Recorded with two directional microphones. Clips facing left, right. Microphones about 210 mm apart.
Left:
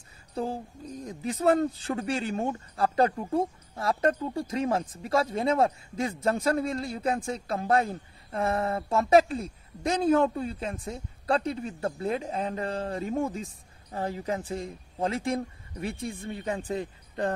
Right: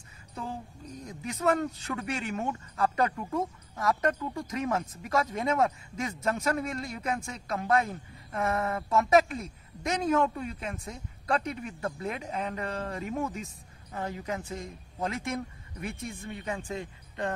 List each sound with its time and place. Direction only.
0.3 s a woman's voice: 35° left (ahead or behind)